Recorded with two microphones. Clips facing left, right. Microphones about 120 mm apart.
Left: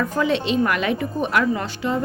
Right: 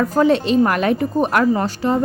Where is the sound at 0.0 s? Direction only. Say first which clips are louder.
Right 6 dB; 40° right (ahead or behind).